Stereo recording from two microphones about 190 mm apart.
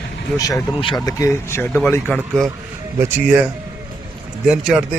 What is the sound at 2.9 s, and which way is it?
A man's voice, 10° right (ahead or behind).